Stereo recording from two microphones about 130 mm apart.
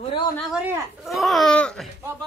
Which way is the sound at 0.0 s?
45° left (ahead or behind).